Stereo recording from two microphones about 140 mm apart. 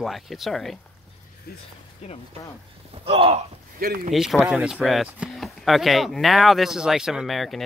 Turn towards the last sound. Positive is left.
turn(degrees=0)  # may be behind; listen again after turning